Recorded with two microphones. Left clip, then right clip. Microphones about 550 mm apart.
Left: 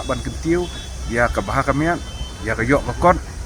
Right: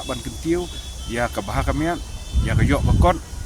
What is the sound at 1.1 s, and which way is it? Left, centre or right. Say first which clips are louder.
Speech: left 5 dB; right.